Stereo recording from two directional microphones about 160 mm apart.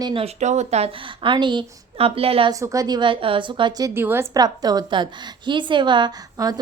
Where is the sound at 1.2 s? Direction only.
30° right (ahead or behind).